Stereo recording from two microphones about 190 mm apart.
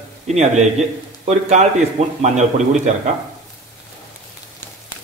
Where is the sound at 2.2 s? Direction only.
35° right (ahead or behind).